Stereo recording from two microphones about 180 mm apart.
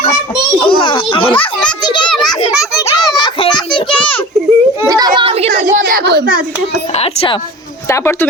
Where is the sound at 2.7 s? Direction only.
25° left (ahead or behind).